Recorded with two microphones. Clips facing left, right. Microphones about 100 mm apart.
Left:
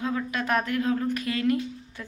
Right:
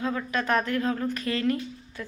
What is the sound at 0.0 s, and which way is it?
Speech, 10° left (ahead or behind).